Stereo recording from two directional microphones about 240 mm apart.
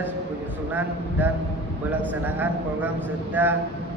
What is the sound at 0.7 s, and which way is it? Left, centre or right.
A man's voice, centre.